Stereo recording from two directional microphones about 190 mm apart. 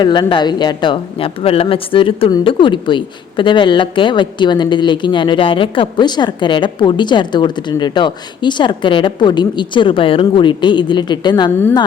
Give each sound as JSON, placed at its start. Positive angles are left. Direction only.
{"t": 0.0, "sound": "speech", "side_deg": 25}